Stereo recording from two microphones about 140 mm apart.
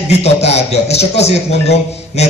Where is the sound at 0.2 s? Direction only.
50° left (ahead or behind).